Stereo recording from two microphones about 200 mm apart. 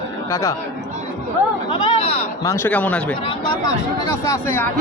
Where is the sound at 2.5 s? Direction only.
10° left (ahead or behind).